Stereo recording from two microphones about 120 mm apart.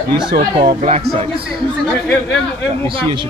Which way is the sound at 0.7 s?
60° right (ahead or behind).